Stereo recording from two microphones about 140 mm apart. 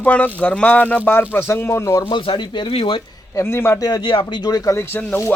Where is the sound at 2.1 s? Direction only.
35° left (ahead or behind).